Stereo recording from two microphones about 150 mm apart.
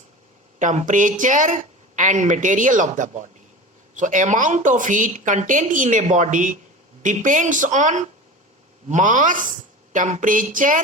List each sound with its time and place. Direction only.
0.6 s a woman's voice: 55° right (ahead or behind)